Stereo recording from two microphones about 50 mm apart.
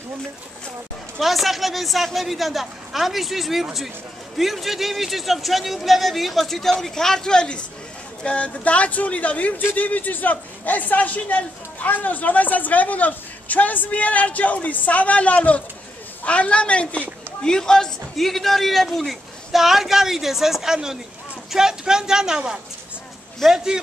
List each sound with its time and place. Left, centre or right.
1.2 s a man's voice: centre; by 17.0 s left
17.4 s a man's voice: centre